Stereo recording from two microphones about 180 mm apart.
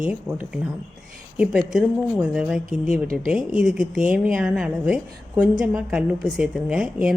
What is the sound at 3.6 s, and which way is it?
A woman's voice, 5° right (ahead or behind).